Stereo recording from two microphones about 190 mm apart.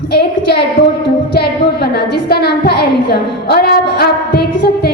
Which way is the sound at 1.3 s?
55° left (ahead or behind).